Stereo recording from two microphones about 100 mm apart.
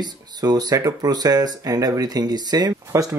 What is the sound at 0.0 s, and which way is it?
Speech, 40° right (ahead or behind).